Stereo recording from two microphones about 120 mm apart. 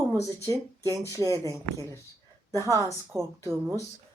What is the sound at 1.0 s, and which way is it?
Speech, 25° left (ahead or behind).